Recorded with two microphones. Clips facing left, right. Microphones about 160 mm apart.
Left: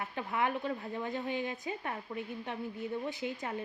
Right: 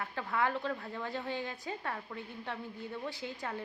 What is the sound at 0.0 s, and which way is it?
A woman's voice, 20° left (ahead or behind).